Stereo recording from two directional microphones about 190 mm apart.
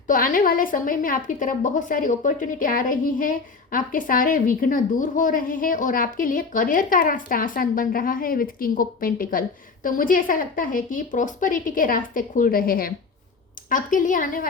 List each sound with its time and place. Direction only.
0.1 s a woman's voice: 45° left (ahead or behind)